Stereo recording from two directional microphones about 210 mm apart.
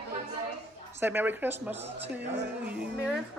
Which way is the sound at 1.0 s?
10° right (ahead or behind).